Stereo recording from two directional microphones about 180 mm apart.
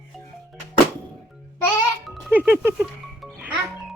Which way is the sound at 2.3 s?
10° right (ahead or behind).